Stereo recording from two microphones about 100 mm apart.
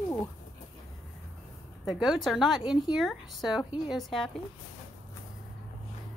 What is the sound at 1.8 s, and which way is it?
A woman's voice, centre (ahead or behind).